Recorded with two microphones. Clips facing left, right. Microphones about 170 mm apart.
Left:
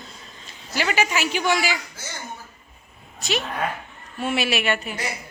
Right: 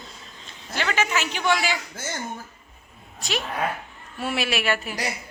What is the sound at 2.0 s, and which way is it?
Speech, 55° right (ahead or behind).